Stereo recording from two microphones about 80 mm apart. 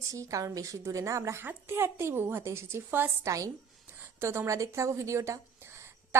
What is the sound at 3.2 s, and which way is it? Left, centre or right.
Speech, right.